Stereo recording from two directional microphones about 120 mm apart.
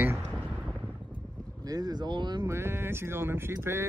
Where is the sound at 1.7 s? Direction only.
35° right (ahead or behind).